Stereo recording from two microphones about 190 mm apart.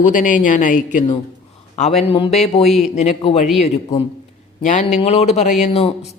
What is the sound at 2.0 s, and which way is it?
Speech, 30° left (ahead or behind).